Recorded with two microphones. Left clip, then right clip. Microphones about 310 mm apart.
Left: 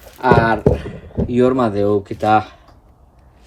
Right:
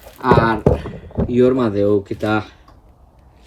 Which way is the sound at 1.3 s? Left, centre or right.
Centre.